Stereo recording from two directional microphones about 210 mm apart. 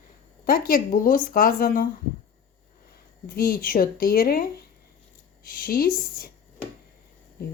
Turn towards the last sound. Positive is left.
turn(degrees=45)  # may be behind; listen again after turning